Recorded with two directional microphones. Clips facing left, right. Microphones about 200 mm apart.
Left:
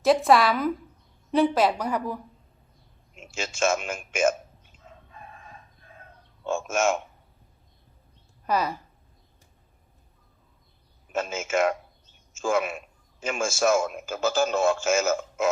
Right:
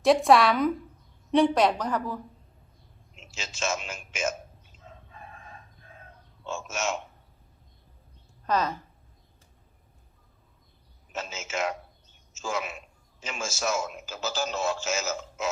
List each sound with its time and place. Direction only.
0.0 s a woman's voice: centre (ahead or behind)
3.2 s a man's voice: 50° left (ahead or behind)
6.4 s a man's voice: 55° left (ahead or behind)
8.4 s a woman's voice: 10° left (ahead or behind)
11.1 s a man's voice: 50° left (ahead or behind)